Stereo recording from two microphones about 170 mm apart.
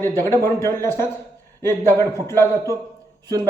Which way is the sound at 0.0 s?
15° left (ahead or behind).